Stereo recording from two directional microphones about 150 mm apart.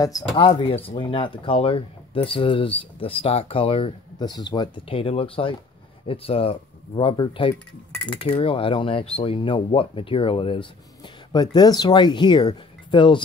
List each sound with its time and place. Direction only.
0.4 s speech: 35° left (ahead or behind)
4.3 s speech: 25° left (ahead or behind)
7.5 s speech: 10° left (ahead or behind)
8.2 s speech: 35° left (ahead or behind)